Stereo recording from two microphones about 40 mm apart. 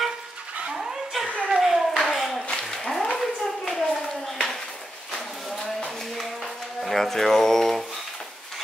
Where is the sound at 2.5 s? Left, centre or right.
Centre.